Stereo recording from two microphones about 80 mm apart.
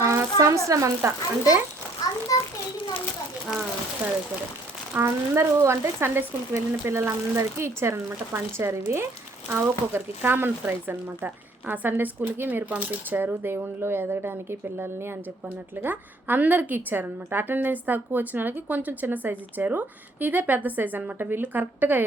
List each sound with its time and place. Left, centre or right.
0.0 s speech: right
2.0 s a sound: left
4.9 s speech: right